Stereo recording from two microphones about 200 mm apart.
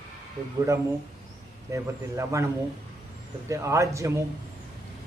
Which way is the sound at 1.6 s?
15° right (ahead or behind).